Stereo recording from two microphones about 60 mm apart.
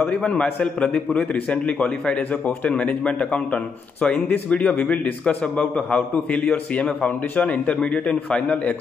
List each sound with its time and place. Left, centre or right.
0.0 s a man's voice: centre